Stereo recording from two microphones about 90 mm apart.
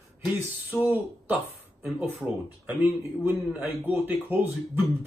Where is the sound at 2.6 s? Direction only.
20° right (ahead or behind).